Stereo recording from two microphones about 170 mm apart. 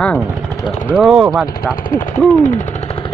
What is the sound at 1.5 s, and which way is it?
Speech, 55° left (ahead or behind).